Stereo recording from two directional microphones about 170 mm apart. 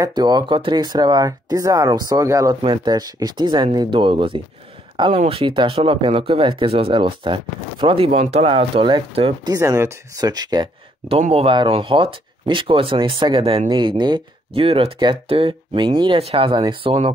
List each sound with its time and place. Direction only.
0.0 s speech: 25° right (ahead or behind)
9.5 s speech: 20° right (ahead or behind)
11.1 s speech: 35° right (ahead or behind)